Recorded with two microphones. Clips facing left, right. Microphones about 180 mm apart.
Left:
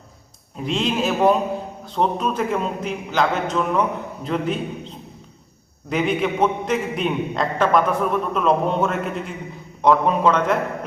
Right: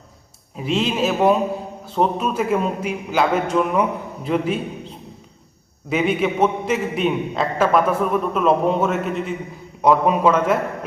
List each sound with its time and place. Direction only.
0.5 s a man's voice: 5° right (ahead or behind)
5.9 s a man's voice: 5° right (ahead or behind)